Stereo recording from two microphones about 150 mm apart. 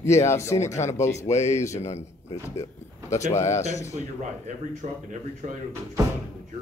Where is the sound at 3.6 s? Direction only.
50° left (ahead or behind).